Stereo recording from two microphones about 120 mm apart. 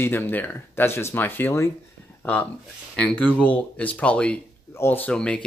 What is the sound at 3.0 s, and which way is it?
Speech, 10° left (ahead or behind).